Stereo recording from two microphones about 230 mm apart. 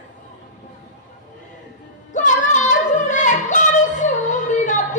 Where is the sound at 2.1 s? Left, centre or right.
Left.